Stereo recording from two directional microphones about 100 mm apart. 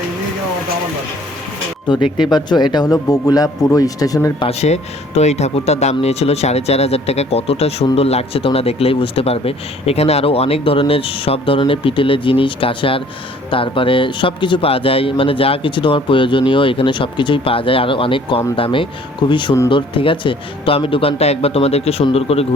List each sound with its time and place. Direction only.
1.9 s a man's voice: 50° left (ahead or behind)
4.4 s a man's voice: 85° left